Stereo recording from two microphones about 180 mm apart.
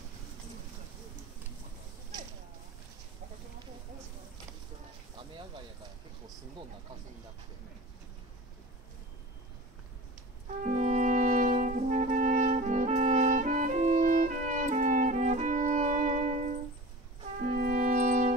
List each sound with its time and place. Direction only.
10.6 s brass instrument: 40° right (ahead or behind)
17.5 s music: 45° right (ahead or behind)